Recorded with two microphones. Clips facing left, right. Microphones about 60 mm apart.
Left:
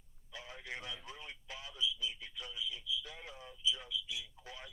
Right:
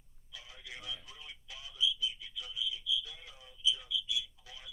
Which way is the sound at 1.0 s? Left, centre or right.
Left.